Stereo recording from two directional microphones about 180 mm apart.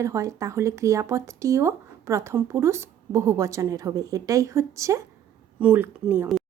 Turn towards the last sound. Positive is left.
turn(degrees=-10)  # may be behind; listen again after turning